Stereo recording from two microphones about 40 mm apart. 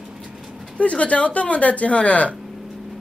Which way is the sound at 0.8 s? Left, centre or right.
Left.